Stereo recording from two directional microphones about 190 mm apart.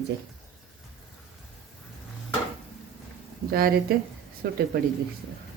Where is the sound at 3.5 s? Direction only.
50° right (ahead or behind).